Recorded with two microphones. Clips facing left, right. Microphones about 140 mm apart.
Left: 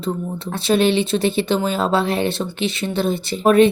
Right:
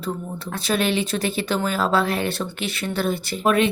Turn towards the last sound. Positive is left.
turn(degrees=35)  # may be behind; listen again after turning